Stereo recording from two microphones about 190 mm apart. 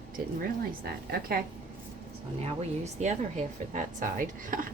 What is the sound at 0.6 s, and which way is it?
Speech, 55° right (ahead or behind).